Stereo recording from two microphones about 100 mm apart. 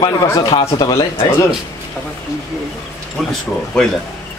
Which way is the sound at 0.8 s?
55° left (ahead or behind).